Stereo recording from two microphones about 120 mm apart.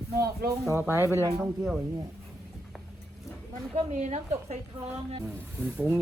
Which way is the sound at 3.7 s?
75° right (ahead or behind).